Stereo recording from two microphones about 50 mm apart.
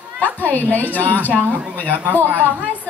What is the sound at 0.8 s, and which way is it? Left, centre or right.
Speech, left.